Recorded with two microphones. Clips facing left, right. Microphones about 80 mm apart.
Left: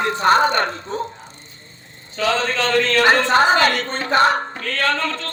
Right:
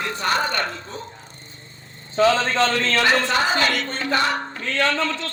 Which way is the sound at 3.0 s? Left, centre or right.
Left.